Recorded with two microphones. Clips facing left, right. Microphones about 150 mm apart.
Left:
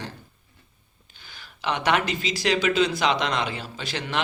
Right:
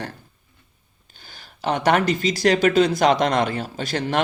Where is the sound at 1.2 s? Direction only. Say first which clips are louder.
Right 4 dB; 40° right (ahead or behind).